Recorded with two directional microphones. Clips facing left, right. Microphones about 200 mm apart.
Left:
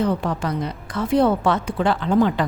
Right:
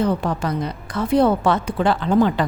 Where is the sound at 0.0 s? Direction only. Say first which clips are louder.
Right 1 dB; 40° right (ahead or behind).